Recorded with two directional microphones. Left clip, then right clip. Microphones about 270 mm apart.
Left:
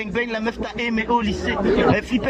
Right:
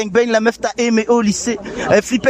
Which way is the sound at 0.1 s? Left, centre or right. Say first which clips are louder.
Right 11 dB; right.